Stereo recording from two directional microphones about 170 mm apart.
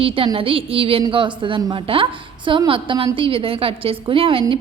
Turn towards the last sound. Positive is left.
turn(degrees=-30)  # may be behind; listen again after turning